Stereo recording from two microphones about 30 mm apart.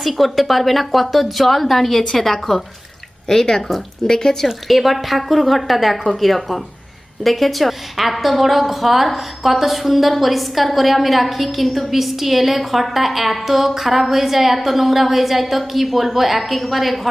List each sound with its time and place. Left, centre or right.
0.2 s a woman's voice: centre
4.7 s a woman's voice: centre